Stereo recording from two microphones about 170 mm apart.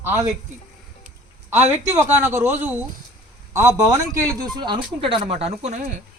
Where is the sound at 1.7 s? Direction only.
15° right (ahead or behind); by 5.8 s 40° right (ahead or behind).